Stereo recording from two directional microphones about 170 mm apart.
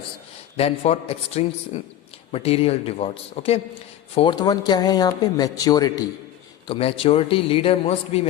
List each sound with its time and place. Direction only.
0.5 s a man's voice: 35° left (ahead or behind)
6.7 s a man's voice: 35° left (ahead or behind)